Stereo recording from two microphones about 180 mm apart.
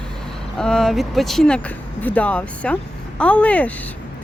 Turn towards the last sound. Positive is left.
turn(degrees=10)  # may be behind; listen again after turning